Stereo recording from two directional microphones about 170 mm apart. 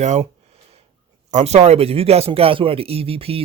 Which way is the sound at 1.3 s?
40° right (ahead or behind).